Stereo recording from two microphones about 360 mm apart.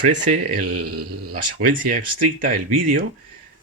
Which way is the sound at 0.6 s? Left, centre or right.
Right.